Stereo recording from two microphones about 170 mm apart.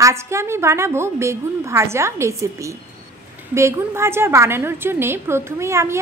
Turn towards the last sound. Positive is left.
turn(degrees=-15)  # may be behind; listen again after turning